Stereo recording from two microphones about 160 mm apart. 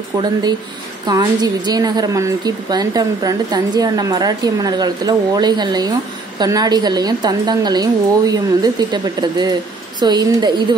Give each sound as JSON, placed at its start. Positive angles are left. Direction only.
{"t": 0.2, "sound": "a woman's voice", "side_deg": -25}